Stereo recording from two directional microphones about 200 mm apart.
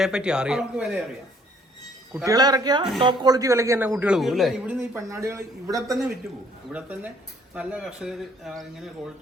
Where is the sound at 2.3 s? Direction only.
20° right (ahead or behind).